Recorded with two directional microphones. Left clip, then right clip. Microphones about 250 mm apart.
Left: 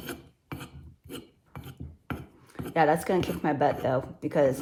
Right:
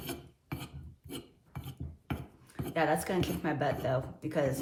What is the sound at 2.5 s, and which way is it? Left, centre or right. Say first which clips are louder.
Speech: left 6 dB; left.